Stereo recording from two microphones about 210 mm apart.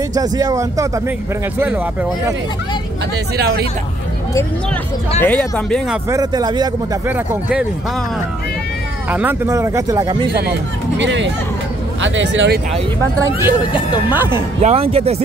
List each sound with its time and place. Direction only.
0.1 s speech: 15° right (ahead or behind)
3.3 s speech: 50° right (ahead or behind)
5.2 s speech: 5° left (ahead or behind)
6.0 s speech: 15° right (ahead or behind)
9.1 s speech: 10° right (ahead or behind)
11.0 s speech: 60° right (ahead or behind)
13.4 s speech: 5° right (ahead or behind)
14.6 s speech: 30° right (ahead or behind)